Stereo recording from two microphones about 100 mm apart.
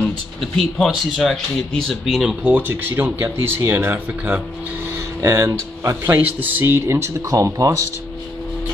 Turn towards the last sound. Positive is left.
turn(degrees=-30)  # may be behind; listen again after turning